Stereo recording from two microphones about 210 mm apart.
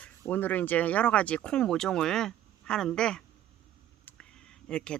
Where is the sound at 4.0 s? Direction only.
5° left (ahead or behind).